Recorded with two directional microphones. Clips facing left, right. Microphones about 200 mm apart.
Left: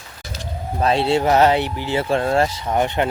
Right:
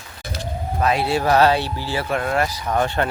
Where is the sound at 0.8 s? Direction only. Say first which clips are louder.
Left 3 dB; 30° left (ahead or behind).